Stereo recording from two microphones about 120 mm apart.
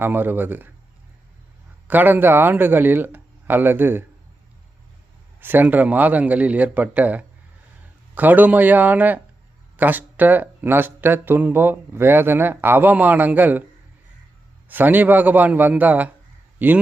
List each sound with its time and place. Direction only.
0.0 s speech: 15° right (ahead or behind)
1.9 s speech: 15° right (ahead or behind)
5.4 s speech: 15° right (ahead or behind)
14.7 s a man's voice: 15° right (ahead or behind)